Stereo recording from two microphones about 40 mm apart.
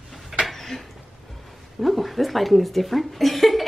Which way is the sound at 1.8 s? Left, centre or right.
Centre.